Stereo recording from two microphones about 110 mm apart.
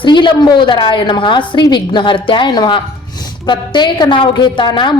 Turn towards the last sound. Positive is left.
turn(degrees=45)  # may be behind; listen again after turning